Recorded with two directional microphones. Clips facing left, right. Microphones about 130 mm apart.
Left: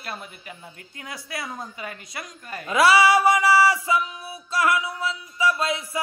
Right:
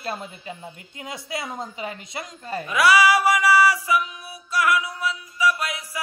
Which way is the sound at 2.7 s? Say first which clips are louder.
Left 1 dB; 25° left (ahead or behind).